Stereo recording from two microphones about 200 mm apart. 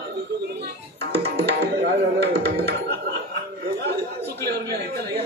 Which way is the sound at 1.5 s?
55° right (ahead or behind).